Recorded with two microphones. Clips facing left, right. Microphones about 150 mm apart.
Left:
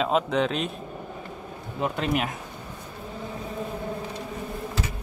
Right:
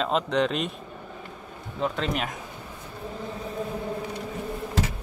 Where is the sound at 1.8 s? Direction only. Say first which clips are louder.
Even; 10° left (ahead or behind).